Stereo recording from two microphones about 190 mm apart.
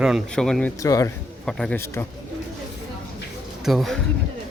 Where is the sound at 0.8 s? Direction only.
20° left (ahead or behind).